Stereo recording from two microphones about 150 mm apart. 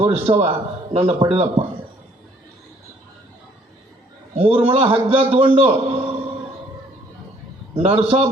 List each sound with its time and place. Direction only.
0.0 s speech: 40° right (ahead or behind)
4.4 s a man's voice: 40° right (ahead or behind)
7.8 s a man's voice: 40° right (ahead or behind)